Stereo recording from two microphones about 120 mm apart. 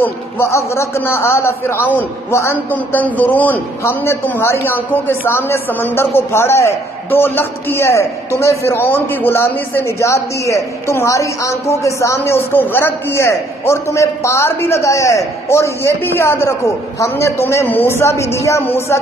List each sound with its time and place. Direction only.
0.0 s a man's voice: 20° left (ahead or behind)